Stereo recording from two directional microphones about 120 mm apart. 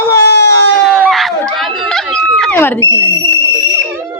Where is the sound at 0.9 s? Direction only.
5° right (ahead or behind).